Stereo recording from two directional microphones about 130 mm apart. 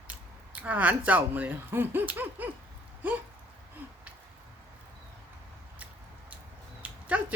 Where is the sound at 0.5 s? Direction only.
10° right (ahead or behind).